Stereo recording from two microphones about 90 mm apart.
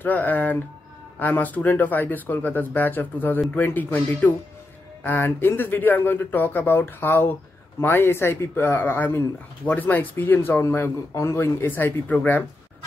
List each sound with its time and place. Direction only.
0.0 s speech: 20° left (ahead or behind)